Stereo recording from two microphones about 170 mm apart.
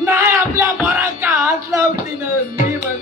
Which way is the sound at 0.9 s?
10° right (ahead or behind).